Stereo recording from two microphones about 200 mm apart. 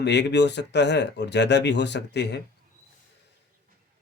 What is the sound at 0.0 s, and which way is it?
Speech, 60° left (ahead or behind).